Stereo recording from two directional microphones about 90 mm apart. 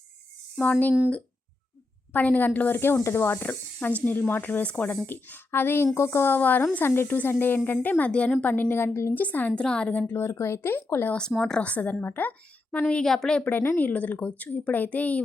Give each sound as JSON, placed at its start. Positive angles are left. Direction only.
{"t": 0.6, "sound": "speech", "side_deg": 20}
{"t": 2.1, "sound": "speech", "side_deg": 20}
{"t": 10.1, "sound": "speech", "side_deg": 25}
{"t": 11.1, "sound": "speech", "side_deg": 5}
{"t": 12.9, "sound": "speech", "side_deg": 5}